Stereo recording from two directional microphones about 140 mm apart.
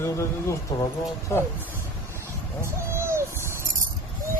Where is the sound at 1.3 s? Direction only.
20° left (ahead or behind).